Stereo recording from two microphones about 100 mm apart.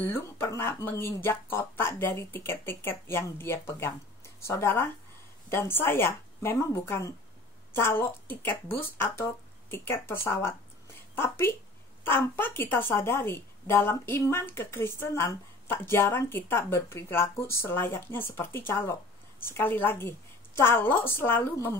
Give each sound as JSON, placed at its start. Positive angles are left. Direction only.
{"t": 0.0, "sound": "a woman's voice", "side_deg": 25}